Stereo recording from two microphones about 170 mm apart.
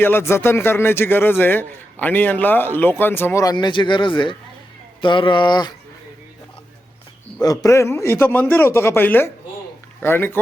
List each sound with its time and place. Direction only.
0.0 s a man's voice: 15° left (ahead or behind)
7.4 s a man's voice: 20° left (ahead or behind)